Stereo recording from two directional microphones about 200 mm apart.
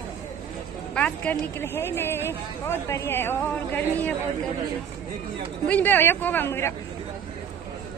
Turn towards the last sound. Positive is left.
turn(degrees=15)  # may be behind; listen again after turning